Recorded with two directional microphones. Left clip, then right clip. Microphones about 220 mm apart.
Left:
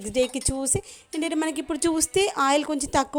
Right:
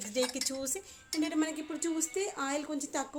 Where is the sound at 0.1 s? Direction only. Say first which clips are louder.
Left 8 dB; 35° left (ahead or behind).